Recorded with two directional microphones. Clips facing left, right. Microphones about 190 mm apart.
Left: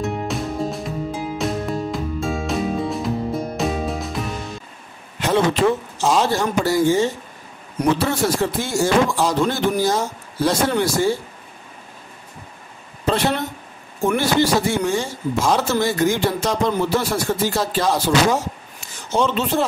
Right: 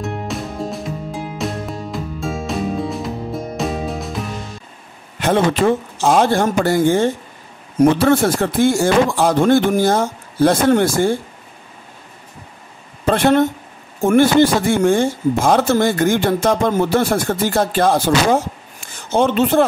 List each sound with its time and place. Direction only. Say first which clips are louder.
0.0 s music: left 1 dB; centre (ahead or behind)
5.2 s speech: right 2 dB; 50° right (ahead or behind)
13.0 s a woman's voice: right 7 dB; 50° right (ahead or behind)